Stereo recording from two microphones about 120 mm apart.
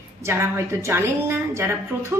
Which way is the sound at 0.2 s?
20° right (ahead or behind).